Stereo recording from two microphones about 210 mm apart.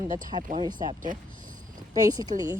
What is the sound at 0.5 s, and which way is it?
Speech, 20° right (ahead or behind).